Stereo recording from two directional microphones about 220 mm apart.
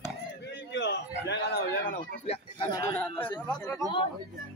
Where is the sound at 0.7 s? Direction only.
50° left (ahead or behind).